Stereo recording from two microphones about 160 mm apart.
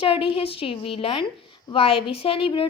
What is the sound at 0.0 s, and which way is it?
A woman's voice, 35° left (ahead or behind).